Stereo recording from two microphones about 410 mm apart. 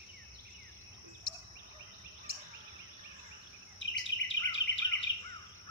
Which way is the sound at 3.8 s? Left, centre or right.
Left.